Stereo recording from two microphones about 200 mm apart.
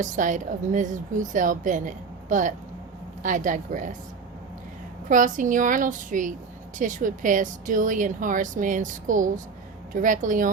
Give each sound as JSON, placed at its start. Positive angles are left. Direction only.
{"t": 0.0, "sound": "a woman's voice", "side_deg": -40}
{"t": 5.0, "sound": "a woman's voice", "side_deg": -40}